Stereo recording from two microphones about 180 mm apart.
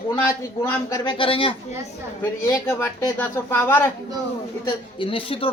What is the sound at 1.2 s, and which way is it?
Speech, 30° left (ahead or behind).